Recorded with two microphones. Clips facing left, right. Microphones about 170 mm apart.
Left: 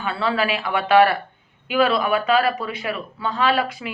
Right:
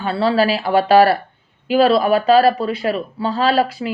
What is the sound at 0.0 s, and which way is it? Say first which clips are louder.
A woman's voice: right 6 dB; 35° right (ahead or behind).